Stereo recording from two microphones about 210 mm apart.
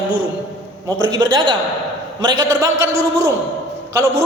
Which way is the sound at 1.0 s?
15° right (ahead or behind).